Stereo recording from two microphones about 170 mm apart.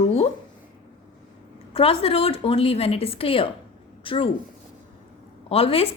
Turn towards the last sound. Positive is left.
turn(degrees=35)  # may be behind; listen again after turning